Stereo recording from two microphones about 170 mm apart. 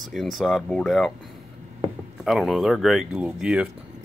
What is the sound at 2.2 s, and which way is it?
Speech, centre (ahead or behind).